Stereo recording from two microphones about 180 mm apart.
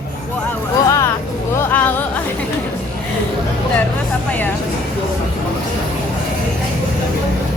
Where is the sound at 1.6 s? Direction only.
10° left (ahead or behind).